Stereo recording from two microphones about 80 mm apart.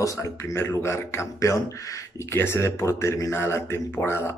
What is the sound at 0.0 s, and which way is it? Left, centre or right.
A man's voice, left.